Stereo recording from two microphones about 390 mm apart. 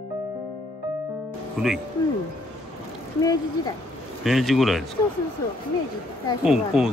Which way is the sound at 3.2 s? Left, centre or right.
Centre.